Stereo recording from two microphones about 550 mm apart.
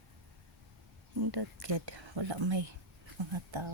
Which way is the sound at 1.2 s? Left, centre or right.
Right.